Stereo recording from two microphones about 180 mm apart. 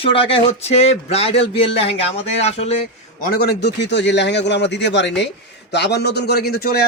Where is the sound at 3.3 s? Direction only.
65° left (ahead or behind).